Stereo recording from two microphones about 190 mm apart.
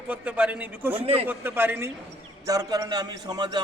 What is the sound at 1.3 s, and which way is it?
A man's voice, 10° right (ahead or behind).